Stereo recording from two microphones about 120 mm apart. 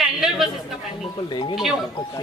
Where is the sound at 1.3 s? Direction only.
45° left (ahead or behind).